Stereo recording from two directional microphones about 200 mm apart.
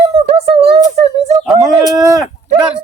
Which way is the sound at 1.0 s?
35° right (ahead or behind).